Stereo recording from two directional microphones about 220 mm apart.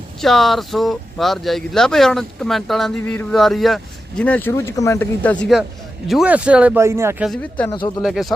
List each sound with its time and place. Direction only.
0.2 s speech: centre (ahead or behind)
7.3 s speech: 5° left (ahead or behind)
7.7 s speech: 20° left (ahead or behind)
8.0 s speech: centre (ahead or behind)